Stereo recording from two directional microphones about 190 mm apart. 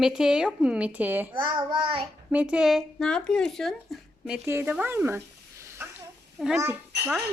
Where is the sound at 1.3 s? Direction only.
25° right (ahead or behind).